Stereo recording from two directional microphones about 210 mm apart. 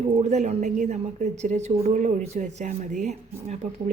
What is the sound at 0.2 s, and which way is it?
A woman's voice, 35° right (ahead or behind).